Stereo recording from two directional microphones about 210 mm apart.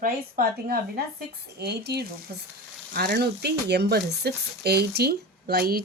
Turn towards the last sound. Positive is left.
turn(degrees=-45)  # may be behind; listen again after turning